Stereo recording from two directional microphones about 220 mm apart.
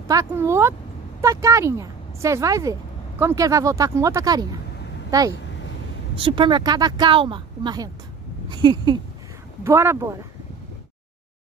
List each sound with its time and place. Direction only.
0.1 s speech: 10° right (ahead or behind)